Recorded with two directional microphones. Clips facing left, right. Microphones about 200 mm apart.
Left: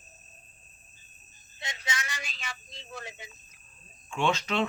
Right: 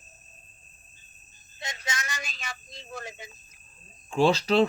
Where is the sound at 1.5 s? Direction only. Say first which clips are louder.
Right 1 dB; 45° right (ahead or behind).